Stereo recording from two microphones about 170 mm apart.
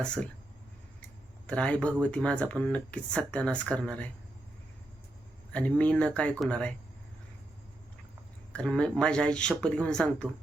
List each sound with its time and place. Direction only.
1.5 s speech: 5° left (ahead or behind)
5.5 s speech: 5° left (ahead or behind)
8.5 s speech: 5° left (ahead or behind)